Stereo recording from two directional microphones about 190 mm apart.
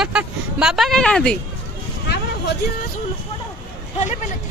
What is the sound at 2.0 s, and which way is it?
Vehicle, 60° left (ahead or behind).